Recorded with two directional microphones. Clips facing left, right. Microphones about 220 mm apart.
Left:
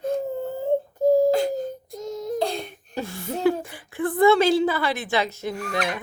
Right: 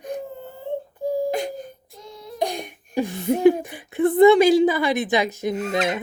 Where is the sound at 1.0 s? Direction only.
45° left (ahead or behind).